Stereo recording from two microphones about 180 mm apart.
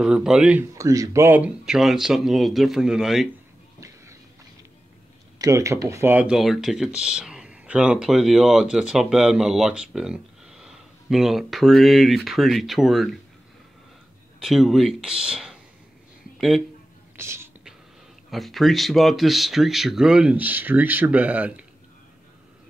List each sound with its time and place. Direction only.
0.0 s speech: 5° right (ahead or behind)
0.7 s speech: 20° right (ahead or behind); by 3.3 s centre (ahead or behind)
3.8 s a sound: 15° right (ahead or behind)
5.4 s speech: 15° right (ahead or behind); by 13.1 s centre (ahead or behind)
14.4 s speech: centre (ahead or behind)
17.2 s whispering: 15° right (ahead or behind)
18.3 s speech: centre (ahead or behind)